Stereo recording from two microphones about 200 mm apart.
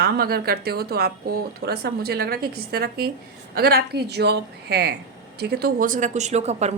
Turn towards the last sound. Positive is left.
turn(degrees=-35)  # may be behind; listen again after turning